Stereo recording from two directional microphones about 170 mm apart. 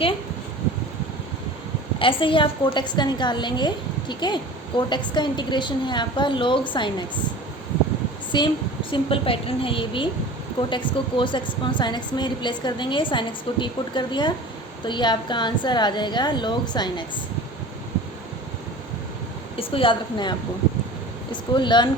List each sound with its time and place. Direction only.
2.0 s a woman's voice: 30° left (ahead or behind)
8.3 s a woman's voice: 30° left (ahead or behind)
19.5 s a woman's voice: 30° left (ahead or behind)
21.5 s a woman's voice: 25° left (ahead or behind)